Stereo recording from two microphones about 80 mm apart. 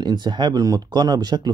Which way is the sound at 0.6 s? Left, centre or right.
Right.